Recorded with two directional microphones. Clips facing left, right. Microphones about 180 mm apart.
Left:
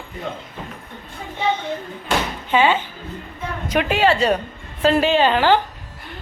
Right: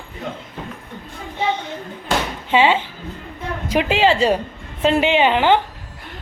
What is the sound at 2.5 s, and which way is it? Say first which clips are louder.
A woman's voice: right 1 dB; 25° right (ahead or behind).